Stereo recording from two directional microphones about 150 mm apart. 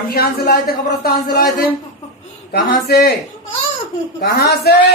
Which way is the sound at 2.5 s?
90° left.